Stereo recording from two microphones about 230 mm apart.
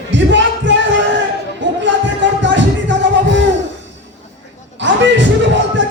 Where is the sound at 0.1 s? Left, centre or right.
Right.